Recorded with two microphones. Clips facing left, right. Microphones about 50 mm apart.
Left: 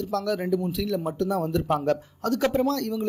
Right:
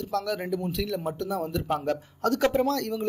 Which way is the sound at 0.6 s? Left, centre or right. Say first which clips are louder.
Left 2 dB; right.